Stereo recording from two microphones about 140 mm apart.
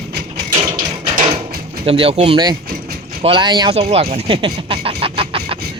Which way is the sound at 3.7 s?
50° right (ahead or behind).